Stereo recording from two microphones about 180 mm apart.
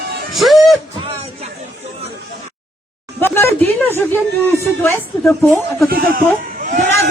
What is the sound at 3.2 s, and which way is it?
Speech, 10° left (ahead or behind).